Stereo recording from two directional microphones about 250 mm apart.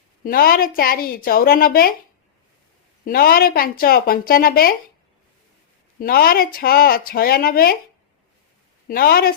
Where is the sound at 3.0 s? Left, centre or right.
Left.